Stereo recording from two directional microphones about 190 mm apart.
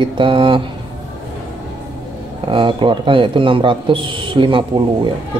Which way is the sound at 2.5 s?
25° right (ahead or behind).